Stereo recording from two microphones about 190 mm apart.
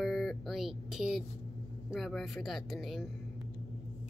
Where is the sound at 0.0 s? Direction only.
Centre (ahead or behind).